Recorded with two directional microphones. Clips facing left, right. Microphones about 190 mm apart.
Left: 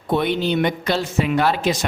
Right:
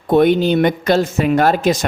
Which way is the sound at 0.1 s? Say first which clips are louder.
Right 7 dB; 45° right (ahead or behind).